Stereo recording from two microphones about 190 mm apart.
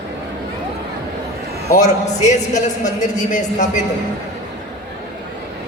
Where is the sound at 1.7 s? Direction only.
40° left (ahead or behind).